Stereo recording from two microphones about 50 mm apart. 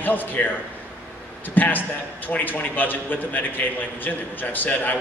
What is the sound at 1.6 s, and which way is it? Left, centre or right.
A man's voice, left.